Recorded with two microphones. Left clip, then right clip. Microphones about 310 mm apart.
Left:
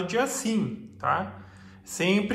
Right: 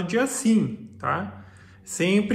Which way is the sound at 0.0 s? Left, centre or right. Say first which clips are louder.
Right 2 dB; centre.